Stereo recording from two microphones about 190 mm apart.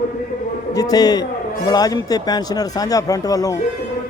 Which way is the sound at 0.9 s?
20° left (ahead or behind).